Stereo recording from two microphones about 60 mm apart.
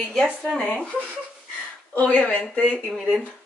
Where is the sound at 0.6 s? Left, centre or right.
Left.